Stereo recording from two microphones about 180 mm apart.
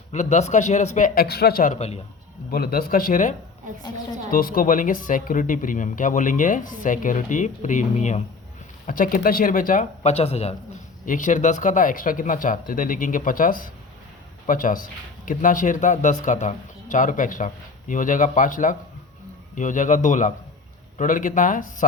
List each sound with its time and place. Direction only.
0.1 s speech: 40° left (ahead or behind)
2.5 s speech: 55° left (ahead or behind); by 10.5 s 35° left (ahead or behind)
11.0 s speech: 45° left (ahead or behind)